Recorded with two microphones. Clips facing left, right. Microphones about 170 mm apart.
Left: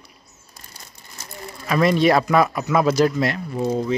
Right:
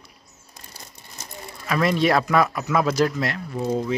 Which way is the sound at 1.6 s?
Centre (ahead or behind).